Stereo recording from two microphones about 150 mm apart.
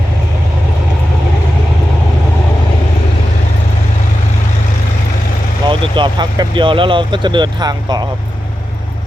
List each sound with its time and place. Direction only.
5.6 s speech: 30° right (ahead or behind)